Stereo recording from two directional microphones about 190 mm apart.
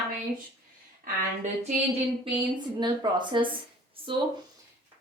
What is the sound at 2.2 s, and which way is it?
A woman's voice, 25° right (ahead or behind).